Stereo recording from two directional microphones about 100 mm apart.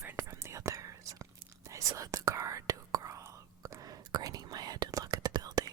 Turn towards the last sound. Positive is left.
turn(degrees=-40)  # may be behind; listen again after turning